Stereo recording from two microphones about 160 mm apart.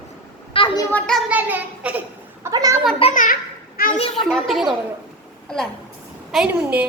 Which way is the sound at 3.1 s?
55° left (ahead or behind).